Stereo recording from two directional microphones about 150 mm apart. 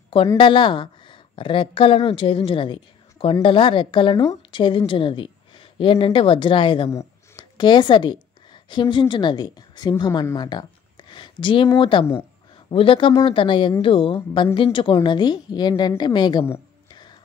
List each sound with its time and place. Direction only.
0.4 s a woman's voice: 35° left (ahead or behind)
6.9 s a woman's voice: 20° left (ahead or behind)